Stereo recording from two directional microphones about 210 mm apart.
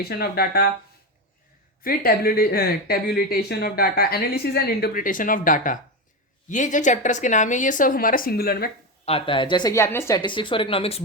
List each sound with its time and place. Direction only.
0.0 s speech: 50° left (ahead or behind)
1.8 s a woman's voice: 45° left (ahead or behind)
9.0 s a woman's voice: 25° left (ahead or behind)